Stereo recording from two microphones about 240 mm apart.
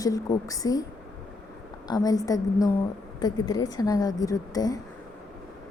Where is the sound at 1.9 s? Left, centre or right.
Centre.